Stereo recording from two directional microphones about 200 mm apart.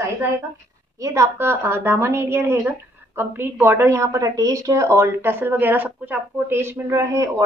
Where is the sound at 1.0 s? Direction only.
15° right (ahead or behind).